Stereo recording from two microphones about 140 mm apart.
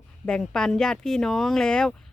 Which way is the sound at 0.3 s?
5° left (ahead or behind).